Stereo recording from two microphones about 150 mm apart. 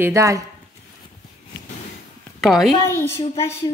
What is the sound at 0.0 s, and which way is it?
Speech, 20° right (ahead or behind).